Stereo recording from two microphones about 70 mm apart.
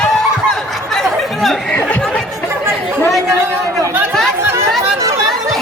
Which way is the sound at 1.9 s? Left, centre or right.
Centre.